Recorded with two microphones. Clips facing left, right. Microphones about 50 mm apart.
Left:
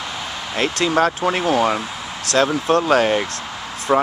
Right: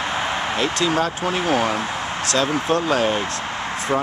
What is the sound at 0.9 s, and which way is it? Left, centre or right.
Speech, left.